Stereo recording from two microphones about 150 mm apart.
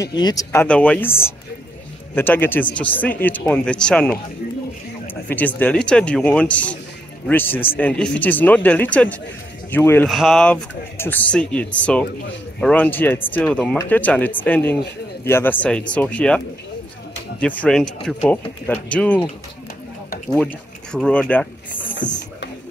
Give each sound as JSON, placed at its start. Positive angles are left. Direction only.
{"t": 0.0, "sound": "speech", "side_deg": 25}
{"t": 10.0, "sound": "speech", "side_deg": 0}
{"t": 20.2, "sound": "speech", "side_deg": 5}